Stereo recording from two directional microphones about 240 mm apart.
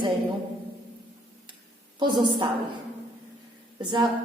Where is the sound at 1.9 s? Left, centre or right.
Centre.